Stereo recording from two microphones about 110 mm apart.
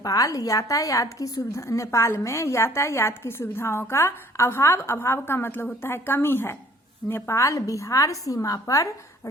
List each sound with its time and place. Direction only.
0.0 s a woman's voice: 30° left (ahead or behind)